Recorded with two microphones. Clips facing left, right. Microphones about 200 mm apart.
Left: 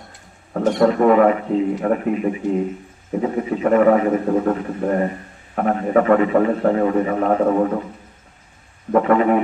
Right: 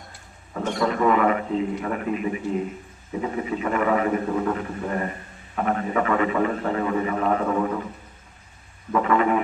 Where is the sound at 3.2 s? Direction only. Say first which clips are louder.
Left 6 dB; 45° left (ahead or behind).